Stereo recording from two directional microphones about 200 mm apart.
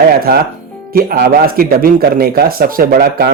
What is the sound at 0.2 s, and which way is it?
Speech, 50° right (ahead or behind).